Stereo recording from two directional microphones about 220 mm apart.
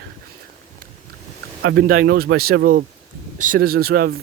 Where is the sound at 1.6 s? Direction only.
50° right (ahead or behind).